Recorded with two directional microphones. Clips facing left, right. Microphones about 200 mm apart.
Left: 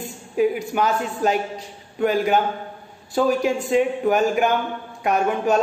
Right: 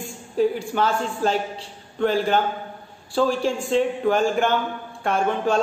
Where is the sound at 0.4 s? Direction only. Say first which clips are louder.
Left 1 dB; 10° left (ahead or behind).